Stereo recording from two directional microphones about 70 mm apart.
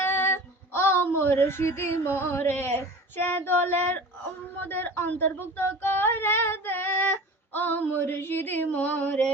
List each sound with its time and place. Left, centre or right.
0.0 s female singing: left
4.6 s speech: left